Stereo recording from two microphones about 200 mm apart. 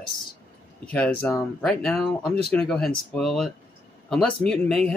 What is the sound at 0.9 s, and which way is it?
Speech, 5° left (ahead or behind).